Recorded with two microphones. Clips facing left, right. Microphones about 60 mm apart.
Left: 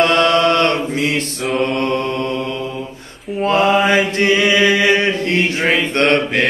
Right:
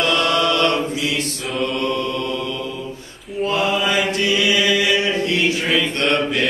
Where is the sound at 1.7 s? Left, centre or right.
Left.